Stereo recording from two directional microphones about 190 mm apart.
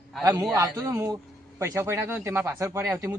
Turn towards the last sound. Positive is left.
turn(degrees=-15)  # may be behind; listen again after turning